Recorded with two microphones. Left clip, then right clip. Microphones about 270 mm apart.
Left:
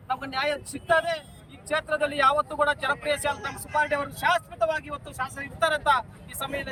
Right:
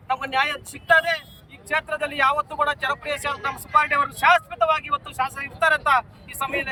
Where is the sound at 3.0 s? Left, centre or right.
Centre.